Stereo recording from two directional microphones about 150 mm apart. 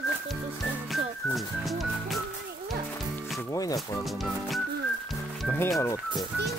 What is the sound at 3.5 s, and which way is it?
Music, 25° left (ahead or behind).